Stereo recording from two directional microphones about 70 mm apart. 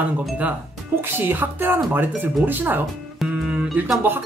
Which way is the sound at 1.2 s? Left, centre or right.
Right.